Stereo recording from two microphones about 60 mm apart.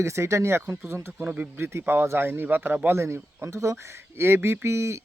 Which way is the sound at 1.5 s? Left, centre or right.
Right.